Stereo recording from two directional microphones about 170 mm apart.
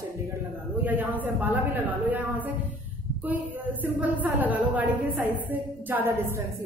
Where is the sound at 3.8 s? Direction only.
10° right (ahead or behind).